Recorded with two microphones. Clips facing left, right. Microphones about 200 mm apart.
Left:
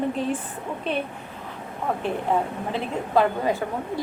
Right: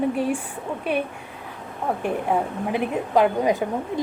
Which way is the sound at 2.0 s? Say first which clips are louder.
Right 1 dB; 15° right (ahead or behind).